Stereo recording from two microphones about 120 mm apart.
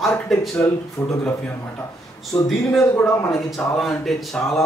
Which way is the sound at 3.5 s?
Centre (ahead or behind).